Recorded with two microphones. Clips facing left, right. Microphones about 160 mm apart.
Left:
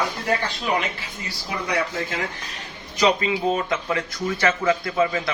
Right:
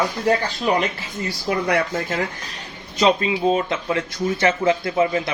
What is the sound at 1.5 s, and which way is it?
Speech, 55° right (ahead or behind).